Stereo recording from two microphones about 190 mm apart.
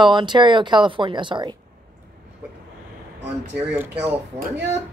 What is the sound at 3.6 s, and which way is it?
Speech, 10° right (ahead or behind).